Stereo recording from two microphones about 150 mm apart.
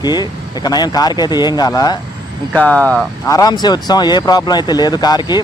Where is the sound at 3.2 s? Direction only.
25° left (ahead or behind).